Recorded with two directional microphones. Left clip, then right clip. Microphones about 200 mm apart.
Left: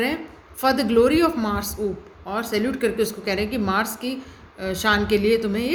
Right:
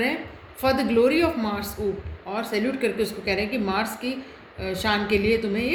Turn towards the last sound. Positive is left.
turn(degrees=55)  # may be behind; listen again after turning